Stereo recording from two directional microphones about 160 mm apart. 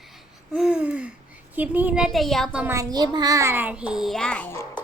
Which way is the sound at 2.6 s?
20° right (ahead or behind).